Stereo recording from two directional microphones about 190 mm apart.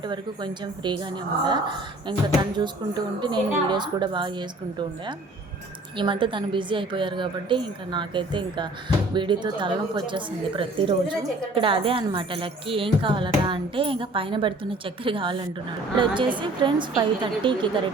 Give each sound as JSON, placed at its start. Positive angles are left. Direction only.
{"t": 0.1, "sound": "a woman's voice", "side_deg": -25}